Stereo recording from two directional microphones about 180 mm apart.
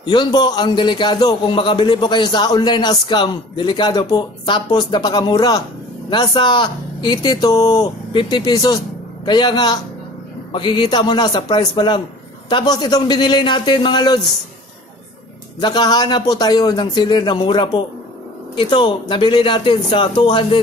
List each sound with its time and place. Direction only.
0.0 s a man's voice: 25° left (ahead or behind)
15.6 s a man's voice: 25° left (ahead or behind)